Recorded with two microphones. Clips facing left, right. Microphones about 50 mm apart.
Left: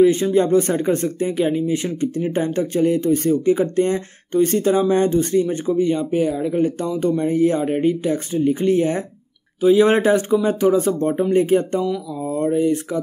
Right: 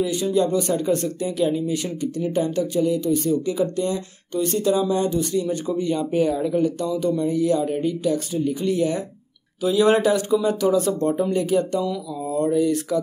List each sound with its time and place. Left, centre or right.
0.0 s speech: left; by 6.6 s centre
6.6 s speech: left
11.8 s speech: left